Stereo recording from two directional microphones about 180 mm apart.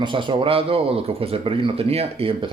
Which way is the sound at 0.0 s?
25° right (ahead or behind).